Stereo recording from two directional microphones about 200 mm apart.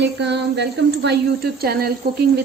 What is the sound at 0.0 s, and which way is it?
A woman's voice, 60° right (ahead or behind).